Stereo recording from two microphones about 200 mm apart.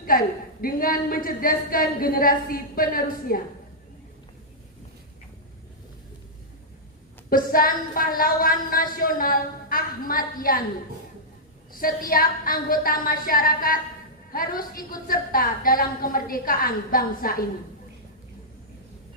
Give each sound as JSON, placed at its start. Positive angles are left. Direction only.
{"t": 0.1, "sound": "a woman's voice", "side_deg": 45}
{"t": 7.3, "sound": "a woman's voice", "side_deg": 45}
{"t": 11.8, "sound": "a woman's voice", "side_deg": 45}